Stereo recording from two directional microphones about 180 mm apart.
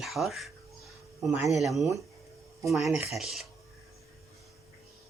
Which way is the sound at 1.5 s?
Centre (ahead or behind).